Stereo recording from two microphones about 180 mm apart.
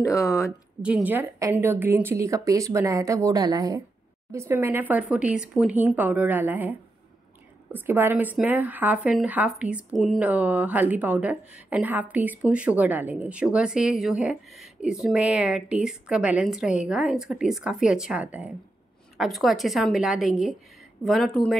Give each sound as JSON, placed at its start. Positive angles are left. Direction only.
{"t": 0.0, "sound": "speech", "side_deg": 15}
{"t": 0.8, "sound": "a woman's voice", "side_deg": -5}